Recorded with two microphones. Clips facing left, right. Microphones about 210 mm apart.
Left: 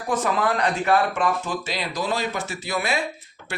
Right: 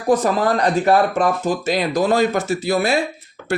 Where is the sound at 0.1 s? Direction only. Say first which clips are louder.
Right 7 dB; 35° right (ahead or behind).